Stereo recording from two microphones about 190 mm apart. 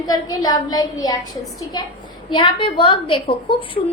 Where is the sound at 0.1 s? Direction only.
20° left (ahead or behind).